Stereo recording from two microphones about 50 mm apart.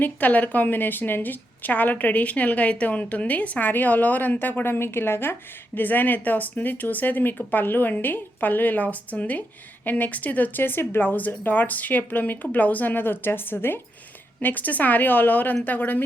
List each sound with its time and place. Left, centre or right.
0.0 s a woman's voice: left
10.6 s a woman's voice: left
14.4 s a woman's voice: left